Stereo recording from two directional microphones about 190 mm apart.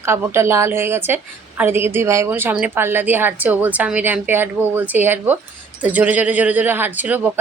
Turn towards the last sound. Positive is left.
turn(degrees=-10)  # may be behind; listen again after turning